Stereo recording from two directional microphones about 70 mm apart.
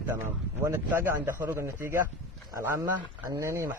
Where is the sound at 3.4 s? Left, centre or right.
Right.